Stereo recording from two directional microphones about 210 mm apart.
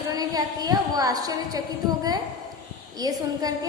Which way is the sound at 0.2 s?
20° right (ahead or behind).